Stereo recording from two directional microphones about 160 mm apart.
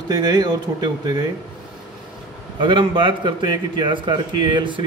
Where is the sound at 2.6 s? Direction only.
30° right (ahead or behind).